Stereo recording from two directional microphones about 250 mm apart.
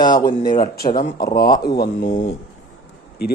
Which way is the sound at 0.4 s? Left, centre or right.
Left.